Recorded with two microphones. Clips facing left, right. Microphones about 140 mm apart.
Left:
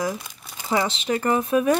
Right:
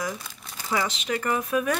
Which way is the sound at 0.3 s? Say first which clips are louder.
Left 4 dB; 20° left (ahead or behind).